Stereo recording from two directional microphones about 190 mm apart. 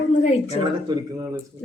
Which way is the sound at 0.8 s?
20° right (ahead or behind).